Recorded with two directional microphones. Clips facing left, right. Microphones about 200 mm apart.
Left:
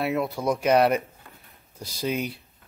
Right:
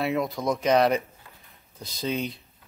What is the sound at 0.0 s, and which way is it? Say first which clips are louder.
Speech: left 1 dB; 5° left (ahead or behind).